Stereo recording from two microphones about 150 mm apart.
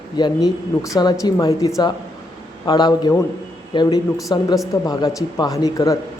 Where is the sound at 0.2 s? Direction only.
30° left (ahead or behind).